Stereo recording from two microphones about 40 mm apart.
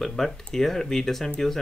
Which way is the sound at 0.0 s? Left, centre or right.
Centre.